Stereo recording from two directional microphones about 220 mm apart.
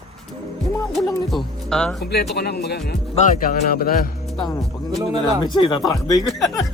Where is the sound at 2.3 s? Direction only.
45° left (ahead or behind).